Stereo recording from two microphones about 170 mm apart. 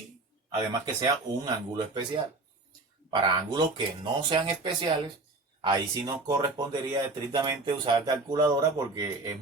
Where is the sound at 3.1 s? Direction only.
30° right (ahead or behind).